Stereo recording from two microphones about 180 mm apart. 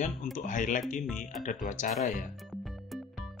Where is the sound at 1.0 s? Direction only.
Centre (ahead or behind).